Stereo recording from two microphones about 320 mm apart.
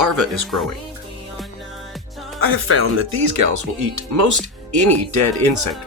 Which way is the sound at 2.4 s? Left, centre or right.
Right.